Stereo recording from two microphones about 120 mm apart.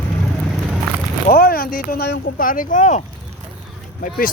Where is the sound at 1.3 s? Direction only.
60° left (ahead or behind).